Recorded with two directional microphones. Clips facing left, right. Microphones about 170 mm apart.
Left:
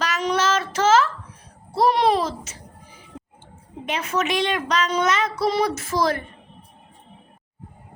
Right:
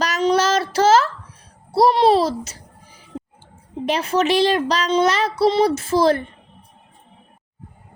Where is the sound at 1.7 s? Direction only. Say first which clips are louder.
Right 4 dB; 35° right (ahead or behind).